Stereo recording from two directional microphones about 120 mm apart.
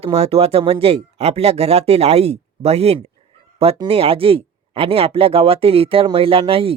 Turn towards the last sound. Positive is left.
turn(degrees=-50)  # may be behind; listen again after turning